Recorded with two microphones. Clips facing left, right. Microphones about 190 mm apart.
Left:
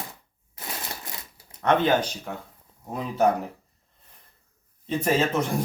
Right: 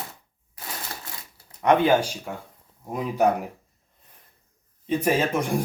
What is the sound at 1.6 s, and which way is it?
Speech, 15° right (ahead or behind).